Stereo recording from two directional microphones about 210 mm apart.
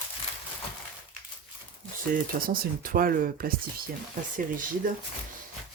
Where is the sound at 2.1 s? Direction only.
45° right (ahead or behind).